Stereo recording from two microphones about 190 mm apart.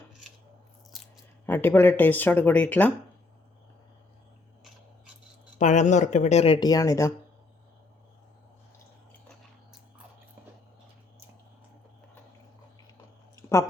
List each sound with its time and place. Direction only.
1.5 s speech: 10° left (ahead or behind)
5.5 s speech: 40° left (ahead or behind); by 7.1 s 15° left (ahead or behind)
13.3 s a sound: 15° left (ahead or behind)